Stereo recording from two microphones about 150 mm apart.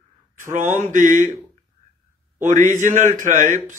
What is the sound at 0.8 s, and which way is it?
Speech, 55° right (ahead or behind).